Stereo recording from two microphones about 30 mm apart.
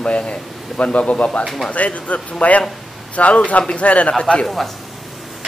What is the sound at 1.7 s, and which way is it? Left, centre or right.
A man's voice, left.